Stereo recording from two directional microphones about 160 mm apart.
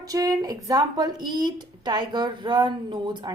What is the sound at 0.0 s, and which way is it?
Speech, 20° right (ahead or behind).